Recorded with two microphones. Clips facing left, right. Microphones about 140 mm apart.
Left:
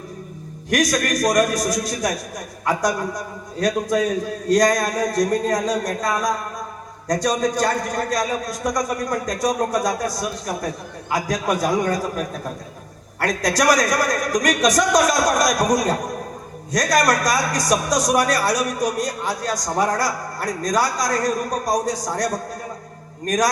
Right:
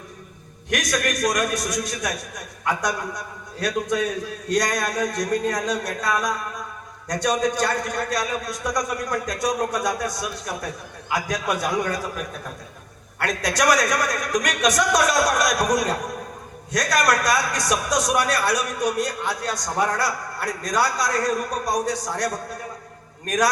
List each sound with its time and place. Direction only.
0.7 s a man's voice: 35° left (ahead or behind)